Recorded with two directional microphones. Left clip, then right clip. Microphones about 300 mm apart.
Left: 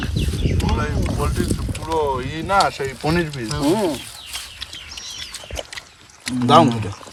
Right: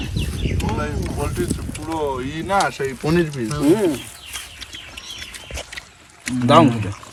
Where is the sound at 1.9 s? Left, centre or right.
Centre.